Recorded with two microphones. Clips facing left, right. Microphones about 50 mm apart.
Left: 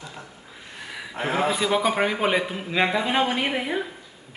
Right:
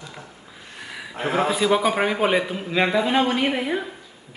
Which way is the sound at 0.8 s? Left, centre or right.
Centre.